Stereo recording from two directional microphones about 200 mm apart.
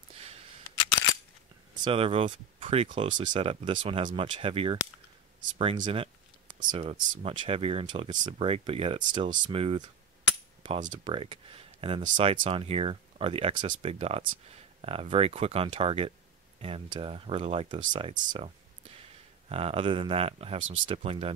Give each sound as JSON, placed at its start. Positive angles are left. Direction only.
{"t": 0.1, "sound": "a sound", "side_deg": -30}
{"t": 1.8, "sound": "speech", "side_deg": -25}
{"t": 11.1, "sound": "speech", "side_deg": -25}
{"t": 19.5, "sound": "speech", "side_deg": -30}